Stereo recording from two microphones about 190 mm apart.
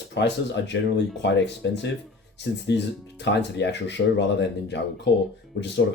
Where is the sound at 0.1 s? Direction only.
70° left (ahead or behind).